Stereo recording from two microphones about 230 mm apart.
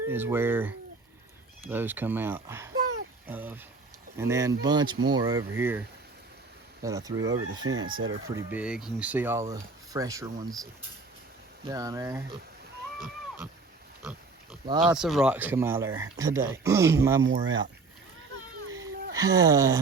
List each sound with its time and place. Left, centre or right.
0.1 s speech: centre
6.8 s speech: centre
7.6 s speech: right
8.4 s speech: centre
11.7 s speech: centre
14.8 s speech: centre
17.2 s speech: right
19.1 s speech: centre